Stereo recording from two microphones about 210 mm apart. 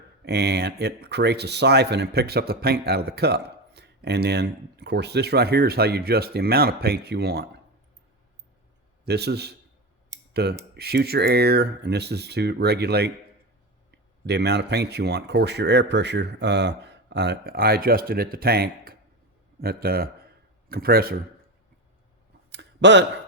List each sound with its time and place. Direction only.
0.3 s speech: 50° right (ahead or behind)
9.0 s speech: 50° right (ahead or behind)
14.3 s speech: 50° right (ahead or behind)
22.5 s a sound: 55° right (ahead or behind)